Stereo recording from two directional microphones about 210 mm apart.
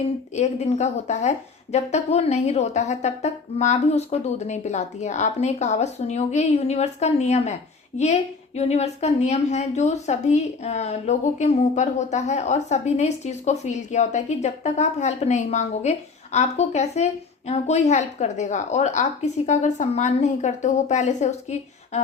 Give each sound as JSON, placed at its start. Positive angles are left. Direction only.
{"t": 0.3, "sound": "a woman's voice", "side_deg": 35}